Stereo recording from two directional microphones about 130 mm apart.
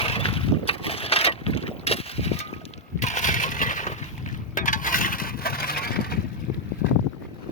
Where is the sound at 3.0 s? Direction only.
65° left (ahead or behind).